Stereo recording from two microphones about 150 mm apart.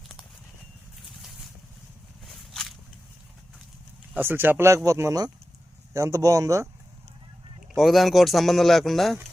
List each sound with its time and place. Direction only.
2.2 s a sound: centre (ahead or behind)
4.1 s speech: 15° right (ahead or behind)
7.8 s speech: centre (ahead or behind)